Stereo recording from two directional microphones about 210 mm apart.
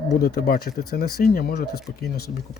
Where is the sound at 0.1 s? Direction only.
50° left (ahead or behind).